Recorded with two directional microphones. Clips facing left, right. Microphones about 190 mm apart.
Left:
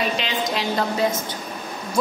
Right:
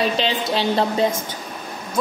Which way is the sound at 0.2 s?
30° right (ahead or behind).